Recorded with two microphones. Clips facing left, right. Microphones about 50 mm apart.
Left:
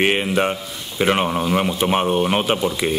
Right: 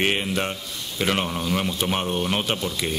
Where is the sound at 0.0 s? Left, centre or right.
Left.